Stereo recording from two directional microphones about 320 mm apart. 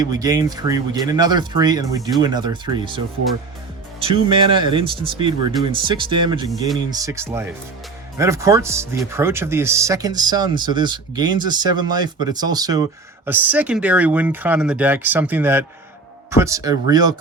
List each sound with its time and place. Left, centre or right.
0.0 s speech: centre
4.0 s speech: centre